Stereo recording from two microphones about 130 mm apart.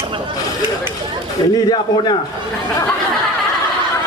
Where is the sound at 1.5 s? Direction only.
35° left (ahead or behind).